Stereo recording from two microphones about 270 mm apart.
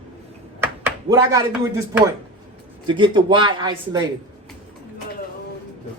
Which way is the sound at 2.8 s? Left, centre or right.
Centre.